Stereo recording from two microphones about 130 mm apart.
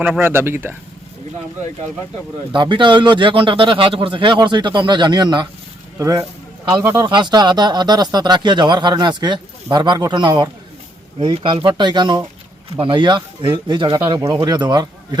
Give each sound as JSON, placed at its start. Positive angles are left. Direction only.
{"t": 0.2, "sound": "speech", "side_deg": -15}
{"t": 2.5, "sound": "speech", "side_deg": -35}